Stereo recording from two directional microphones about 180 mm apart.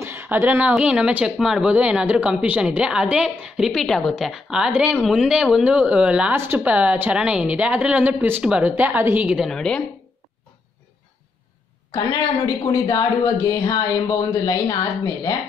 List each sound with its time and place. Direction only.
0.0 s speech: 10° right (ahead or behind); by 9.8 s 5° left (ahead or behind)
11.9 s speech: 20° left (ahead or behind)